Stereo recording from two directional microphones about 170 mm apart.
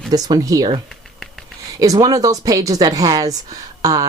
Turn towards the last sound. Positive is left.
turn(degrees=-20)  # may be behind; listen again after turning